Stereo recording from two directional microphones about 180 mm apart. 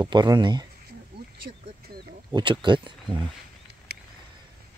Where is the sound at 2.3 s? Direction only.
25° right (ahead or behind).